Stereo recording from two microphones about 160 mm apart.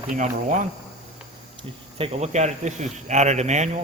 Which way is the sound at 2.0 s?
40° right (ahead or behind).